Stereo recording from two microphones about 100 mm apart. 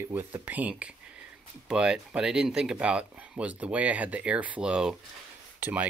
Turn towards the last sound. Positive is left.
turn(degrees=-15)  # may be behind; listen again after turning